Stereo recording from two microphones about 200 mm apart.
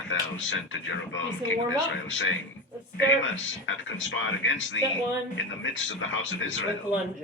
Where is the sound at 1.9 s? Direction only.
70° left (ahead or behind).